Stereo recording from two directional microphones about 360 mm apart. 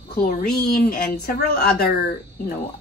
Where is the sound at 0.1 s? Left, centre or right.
Left.